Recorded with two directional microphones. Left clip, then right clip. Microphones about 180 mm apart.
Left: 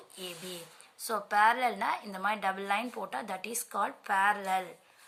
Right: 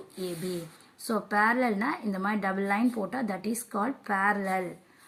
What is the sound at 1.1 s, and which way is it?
A woman's voice, 35° left (ahead or behind).